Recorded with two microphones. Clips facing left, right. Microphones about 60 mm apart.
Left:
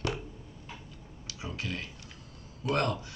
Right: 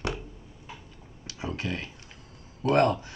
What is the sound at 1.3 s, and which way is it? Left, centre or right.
Speech, right.